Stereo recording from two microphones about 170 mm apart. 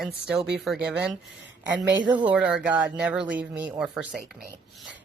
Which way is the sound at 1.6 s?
90° right.